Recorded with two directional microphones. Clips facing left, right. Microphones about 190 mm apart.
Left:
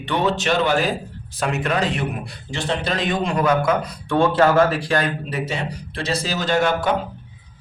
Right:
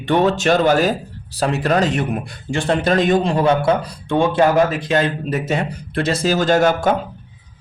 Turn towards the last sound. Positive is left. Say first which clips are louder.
# right 4 dB
turn(degrees=-45)  # may be behind; listen again after turning